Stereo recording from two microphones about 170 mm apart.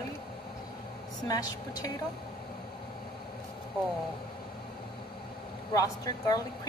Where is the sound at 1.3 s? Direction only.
20° left (ahead or behind).